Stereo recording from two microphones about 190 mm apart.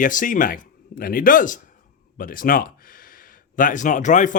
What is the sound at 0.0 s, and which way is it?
Speech, 45° left (ahead or behind).